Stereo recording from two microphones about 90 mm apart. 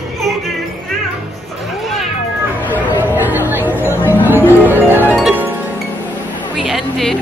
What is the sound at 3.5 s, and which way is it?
Music, 20° right (ahead or behind).